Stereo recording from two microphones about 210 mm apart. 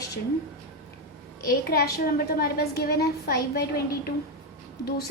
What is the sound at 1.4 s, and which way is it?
A woman's voice, 45° left (ahead or behind).